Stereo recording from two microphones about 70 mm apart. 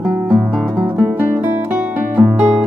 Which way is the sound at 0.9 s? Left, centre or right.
Right.